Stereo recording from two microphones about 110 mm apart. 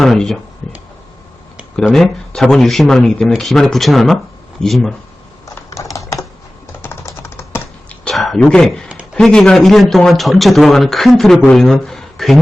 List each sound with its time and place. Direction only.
0.0 s speech: 5° left (ahead or behind)
1.7 s speech: 5° left (ahead or behind)
5.7 s typing: 30° left (ahead or behind)
7.9 s a sound: 5° left (ahead or behind)
8.4 s speech: 5° left (ahead or behind)